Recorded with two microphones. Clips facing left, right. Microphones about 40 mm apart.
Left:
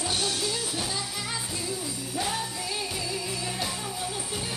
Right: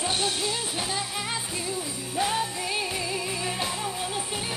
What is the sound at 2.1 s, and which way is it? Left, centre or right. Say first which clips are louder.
Jingle bell: right 5 dB; right.